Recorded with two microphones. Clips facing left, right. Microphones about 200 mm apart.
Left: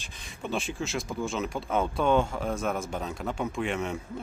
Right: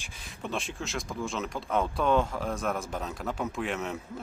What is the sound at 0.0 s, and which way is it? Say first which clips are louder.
Speech: left 1 dB; 5° right (ahead or behind).